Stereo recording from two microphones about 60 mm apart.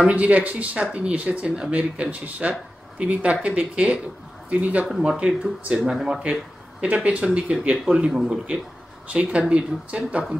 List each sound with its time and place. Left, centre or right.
0.1 s speech: right; by 6.2 s centre
6.8 s speech: right
8.5 s speech: right